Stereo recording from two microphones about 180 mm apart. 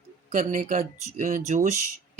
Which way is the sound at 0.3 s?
45° right (ahead or behind).